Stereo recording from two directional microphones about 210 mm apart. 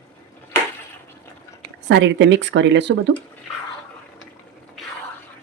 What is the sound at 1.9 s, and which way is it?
Speech, 55° right (ahead or behind).